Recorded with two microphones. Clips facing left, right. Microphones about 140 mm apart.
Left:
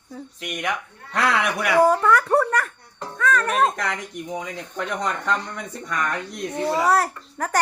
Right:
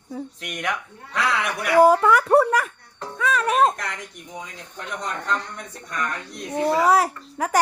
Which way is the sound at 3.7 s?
85° left.